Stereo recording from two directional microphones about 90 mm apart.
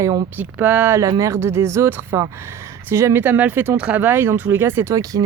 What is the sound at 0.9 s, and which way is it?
Speech, 40° right (ahead or behind).